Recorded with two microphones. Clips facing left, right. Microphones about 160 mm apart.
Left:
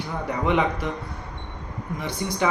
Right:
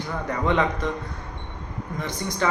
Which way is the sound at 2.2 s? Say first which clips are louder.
Left 4 dB; 15° left (ahead or behind).